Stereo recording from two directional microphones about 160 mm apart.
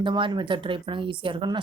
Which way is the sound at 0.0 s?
30° right (ahead or behind).